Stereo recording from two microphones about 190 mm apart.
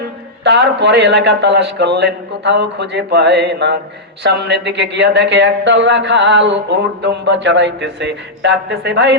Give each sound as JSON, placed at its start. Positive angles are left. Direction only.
{"t": 0.4, "sound": "a man's voice", "side_deg": -65}